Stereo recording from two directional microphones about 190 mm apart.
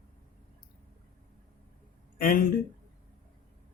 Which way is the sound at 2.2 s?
50° left (ahead or behind).